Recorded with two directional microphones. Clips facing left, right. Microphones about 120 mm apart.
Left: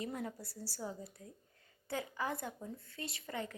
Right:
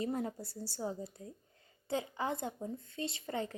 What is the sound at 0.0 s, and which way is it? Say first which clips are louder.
A woman's voice: right 5 dB; 30° right (ahead or behind).